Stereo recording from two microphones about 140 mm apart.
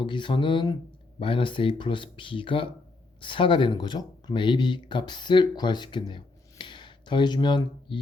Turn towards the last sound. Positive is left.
turn(degrees=35)  # may be behind; listen again after turning